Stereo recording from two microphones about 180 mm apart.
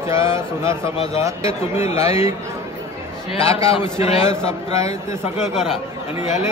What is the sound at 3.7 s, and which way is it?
Speech, 35° left (ahead or behind).